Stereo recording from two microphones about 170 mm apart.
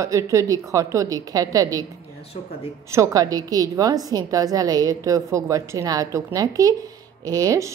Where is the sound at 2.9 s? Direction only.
20° right (ahead or behind).